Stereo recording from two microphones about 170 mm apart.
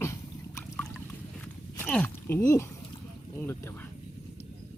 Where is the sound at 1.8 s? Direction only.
10° left (ahead or behind).